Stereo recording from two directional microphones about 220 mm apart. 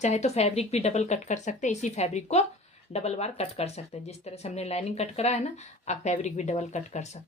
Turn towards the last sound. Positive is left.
turn(degrees=30)  # may be behind; listen again after turning